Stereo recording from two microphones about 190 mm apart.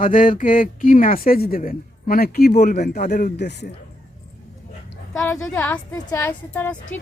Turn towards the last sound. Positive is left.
turn(degrees=10)  # may be behind; listen again after turning